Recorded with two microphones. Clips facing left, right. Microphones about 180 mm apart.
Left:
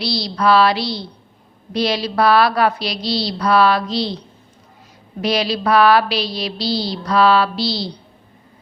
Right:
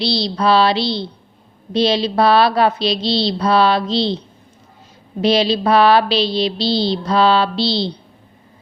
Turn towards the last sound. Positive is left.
turn(degrees=-25)  # may be behind; listen again after turning